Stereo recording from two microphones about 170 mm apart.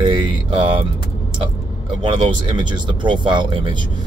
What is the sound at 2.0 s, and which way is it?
Speech, 30° right (ahead or behind).